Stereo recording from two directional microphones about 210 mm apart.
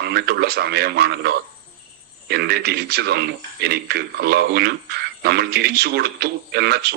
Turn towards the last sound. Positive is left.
turn(degrees=-50)  # may be behind; listen again after turning